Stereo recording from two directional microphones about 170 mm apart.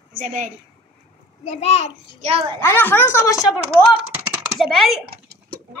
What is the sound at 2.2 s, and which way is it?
Speech, 35° right (ahead or behind).